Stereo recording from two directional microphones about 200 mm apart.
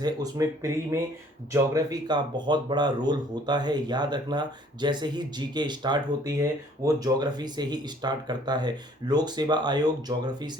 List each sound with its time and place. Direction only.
0.0 s speech: 20° right (ahead or behind)